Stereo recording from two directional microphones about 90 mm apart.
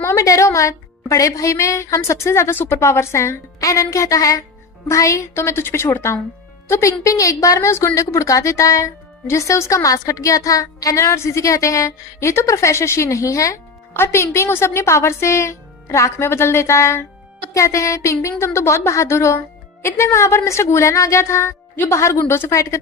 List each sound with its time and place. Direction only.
0.0 s a woman's voice: 35° left (ahead or behind)